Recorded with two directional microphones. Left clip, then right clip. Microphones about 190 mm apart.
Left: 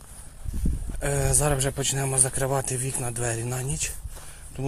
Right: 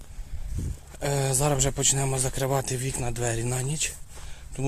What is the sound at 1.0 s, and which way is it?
A man's voice, 20° right (ahead or behind).